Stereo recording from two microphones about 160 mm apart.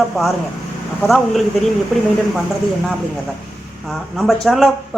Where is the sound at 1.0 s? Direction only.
Centre (ahead or behind).